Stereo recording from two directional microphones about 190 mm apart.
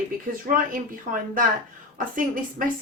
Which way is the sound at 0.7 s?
50° right (ahead or behind).